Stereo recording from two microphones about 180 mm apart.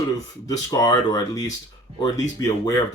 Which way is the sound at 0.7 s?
20° left (ahead or behind).